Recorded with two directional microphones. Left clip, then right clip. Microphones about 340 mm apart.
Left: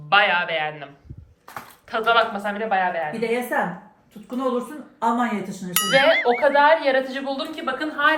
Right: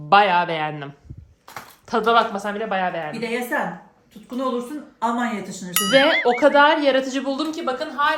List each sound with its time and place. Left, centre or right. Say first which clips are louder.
0.1 s speech: right 2 dB; centre
1.9 s a woman's voice: right 1 dB; centre
3.1 s speech: left 1 dB; centre
6.4 s a woman's voice: right 3 dB; right